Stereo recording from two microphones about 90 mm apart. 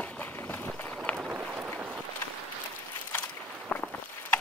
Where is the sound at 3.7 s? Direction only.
15° left (ahead or behind).